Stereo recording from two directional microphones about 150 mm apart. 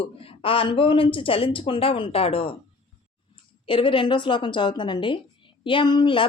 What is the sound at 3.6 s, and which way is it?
A woman's voice, 35° left (ahead or behind).